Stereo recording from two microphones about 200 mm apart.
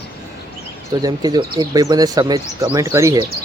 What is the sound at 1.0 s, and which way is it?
Speech, 20° right (ahead or behind).